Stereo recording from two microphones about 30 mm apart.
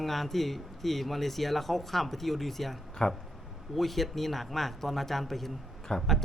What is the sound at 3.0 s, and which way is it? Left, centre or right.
Speech, left.